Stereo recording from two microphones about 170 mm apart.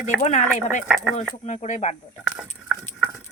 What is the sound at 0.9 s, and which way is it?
Speech, centre (ahead or behind).